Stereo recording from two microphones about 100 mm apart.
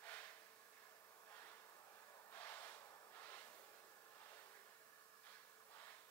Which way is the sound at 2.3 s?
25° left (ahead or behind).